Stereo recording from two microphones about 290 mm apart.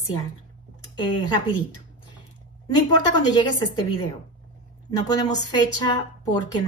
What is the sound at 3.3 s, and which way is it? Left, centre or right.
Speech, centre.